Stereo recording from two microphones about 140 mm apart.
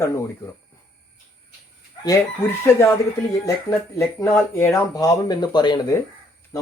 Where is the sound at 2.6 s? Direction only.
20° left (ahead or behind).